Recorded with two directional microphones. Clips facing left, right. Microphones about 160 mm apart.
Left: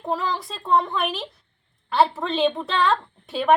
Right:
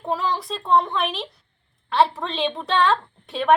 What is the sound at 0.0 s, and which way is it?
A woman's voice, centre (ahead or behind).